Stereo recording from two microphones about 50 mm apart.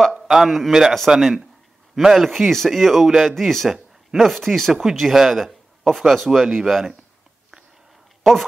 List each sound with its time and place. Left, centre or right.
0.1 s a man's voice: centre
1.1 s a man's voice: centre
3.7 s a sound: centre
4.4 s speech: centre
8.2 s speech: centre